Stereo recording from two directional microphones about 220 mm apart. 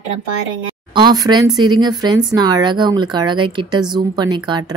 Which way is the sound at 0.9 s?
20° right (ahead or behind).